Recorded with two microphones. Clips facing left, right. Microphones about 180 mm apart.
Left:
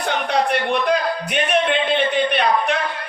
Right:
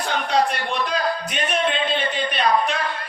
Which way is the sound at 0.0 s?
60° left (ahead or behind).